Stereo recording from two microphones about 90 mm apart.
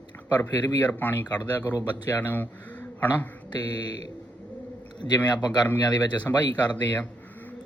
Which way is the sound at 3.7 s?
50° left (ahead or behind).